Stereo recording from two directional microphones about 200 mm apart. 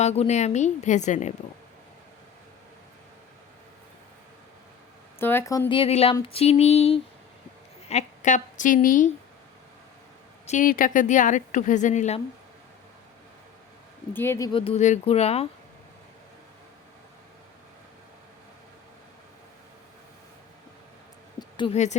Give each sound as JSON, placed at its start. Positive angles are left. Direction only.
{"t": 0.0, "sound": "a woman's voice", "side_deg": 35}
{"t": 5.2, "sound": "a woman's voice", "side_deg": 10}
{"t": 10.4, "sound": "a woman's voice", "side_deg": 40}
{"t": 14.1, "sound": "speech", "side_deg": 10}
{"t": 14.5, "sound": "a woman's voice", "side_deg": 30}
{"t": 21.3, "sound": "a sound", "side_deg": 25}